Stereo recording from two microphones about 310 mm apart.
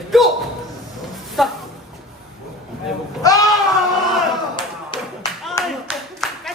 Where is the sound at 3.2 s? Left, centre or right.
Centre.